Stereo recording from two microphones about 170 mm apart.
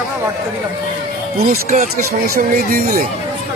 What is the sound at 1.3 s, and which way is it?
Speech, 60° right (ahead or behind).